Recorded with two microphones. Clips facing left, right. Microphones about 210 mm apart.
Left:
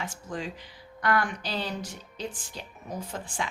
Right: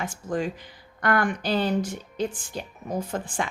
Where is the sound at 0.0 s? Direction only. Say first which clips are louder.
Right 7 dB; 50° right (ahead or behind).